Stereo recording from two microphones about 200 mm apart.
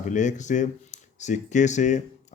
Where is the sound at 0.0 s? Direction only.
40° left (ahead or behind).